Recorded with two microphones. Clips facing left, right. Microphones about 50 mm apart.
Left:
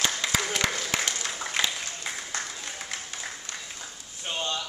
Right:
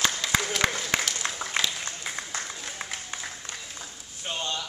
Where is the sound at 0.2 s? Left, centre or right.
Centre.